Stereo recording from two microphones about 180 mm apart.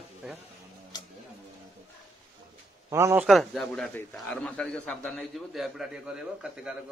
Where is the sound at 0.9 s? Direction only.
20° left (ahead or behind).